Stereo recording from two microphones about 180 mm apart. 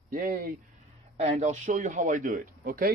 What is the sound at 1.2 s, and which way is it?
Speech, 40° right (ahead or behind).